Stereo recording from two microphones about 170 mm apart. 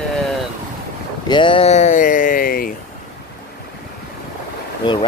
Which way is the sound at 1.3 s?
30° left (ahead or behind).